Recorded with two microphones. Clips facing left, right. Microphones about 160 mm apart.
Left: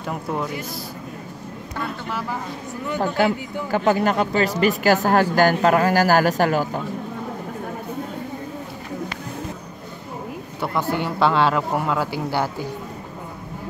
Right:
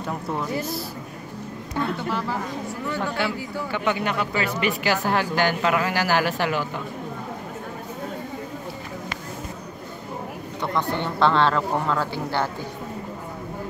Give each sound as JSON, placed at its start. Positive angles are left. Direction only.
{"t": 0.0, "sound": "a woman's voice", "side_deg": 5}
{"t": 3.0, "sound": "a man's voice", "side_deg": 40}
{"t": 10.6, "sound": "speech", "side_deg": 5}